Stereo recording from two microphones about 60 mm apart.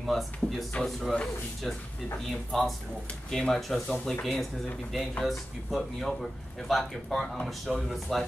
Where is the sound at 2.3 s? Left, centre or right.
Centre.